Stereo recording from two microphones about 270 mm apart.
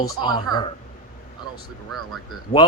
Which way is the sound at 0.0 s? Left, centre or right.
Centre.